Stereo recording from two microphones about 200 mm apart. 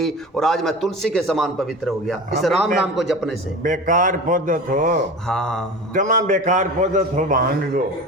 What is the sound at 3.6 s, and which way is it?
A man's voice, 40° right (ahead or behind).